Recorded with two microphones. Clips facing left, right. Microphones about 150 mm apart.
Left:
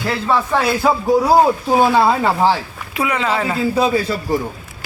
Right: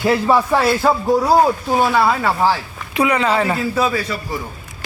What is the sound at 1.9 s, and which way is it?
Speech, 25° left (ahead or behind).